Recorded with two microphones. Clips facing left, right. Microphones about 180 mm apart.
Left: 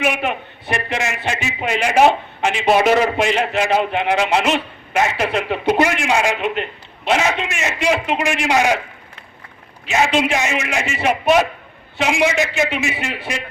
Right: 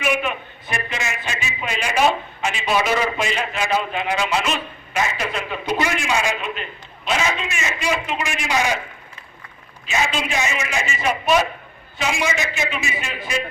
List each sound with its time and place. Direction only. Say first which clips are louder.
0.0 s a man's voice: left 2 dB; 65° left (ahead or behind)
9.8 s a man's voice: left 6 dB; 65° left (ahead or behind)